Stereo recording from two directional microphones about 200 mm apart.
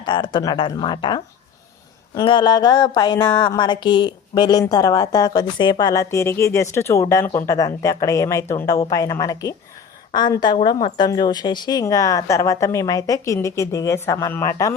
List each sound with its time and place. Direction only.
0.0 s a woman's voice: 25° left (ahead or behind)